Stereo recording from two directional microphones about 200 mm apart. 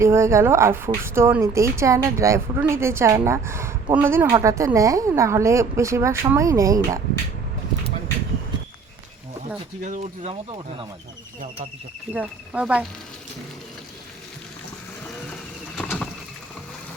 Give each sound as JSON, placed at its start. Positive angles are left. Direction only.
{"t": 0.0, "sound": "speech", "side_deg": -15}
{"t": 9.8, "sound": "speech", "side_deg": -40}
{"t": 12.1, "sound": "speech", "side_deg": -5}
{"t": 15.1, "sound": "vehicle", "side_deg": 5}